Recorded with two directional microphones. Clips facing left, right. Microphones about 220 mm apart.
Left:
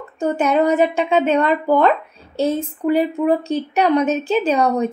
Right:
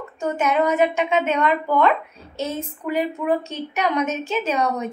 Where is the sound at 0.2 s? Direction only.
35° left (ahead or behind).